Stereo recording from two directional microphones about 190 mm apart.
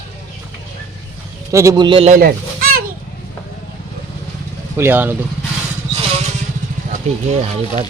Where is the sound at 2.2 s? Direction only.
50° right (ahead or behind).